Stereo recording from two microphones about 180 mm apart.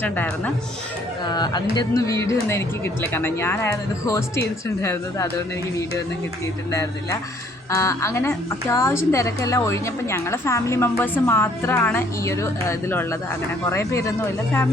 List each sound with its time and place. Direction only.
0.0 s speech: 10° left (ahead or behind)
1.2 s speech: 25° left (ahead or behind)
6.7 s speech: 15° left (ahead or behind)